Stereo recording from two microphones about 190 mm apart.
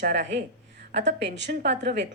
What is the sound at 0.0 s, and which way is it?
A woman's voice, 65° right (ahead or behind).